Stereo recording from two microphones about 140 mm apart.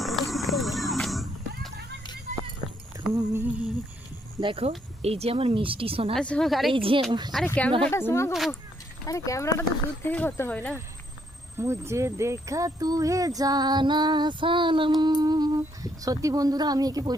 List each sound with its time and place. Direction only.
0.0 s music: centre (ahead or behind)
3.1 s speech: 20° right (ahead or behind)
4.4 s a woman's voice: 40° right (ahead or behind)
6.1 s a woman's voice: 5° left (ahead or behind)
6.7 s speech: 40° right (ahead or behind)
7.4 s speech: 10° left (ahead or behind)
8.3 s a woman's voice: centre (ahead or behind)
9.0 s speech: 25° left (ahead or behind)
11.5 s speech: 20° right (ahead or behind)